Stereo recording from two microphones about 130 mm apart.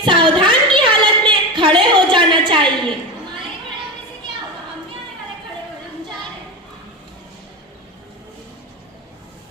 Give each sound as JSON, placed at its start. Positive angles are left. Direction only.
{"t": 0.0, "sound": "a woman's voice", "side_deg": -35}